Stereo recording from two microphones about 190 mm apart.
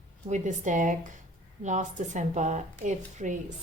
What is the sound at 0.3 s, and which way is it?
Speech, 40° right (ahead or behind).